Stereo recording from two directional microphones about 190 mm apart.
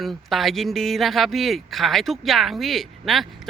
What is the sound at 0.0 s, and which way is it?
Speech, centre (ahead or behind).